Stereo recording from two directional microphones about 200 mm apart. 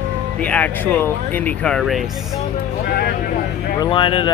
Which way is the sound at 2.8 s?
50° left (ahead or behind).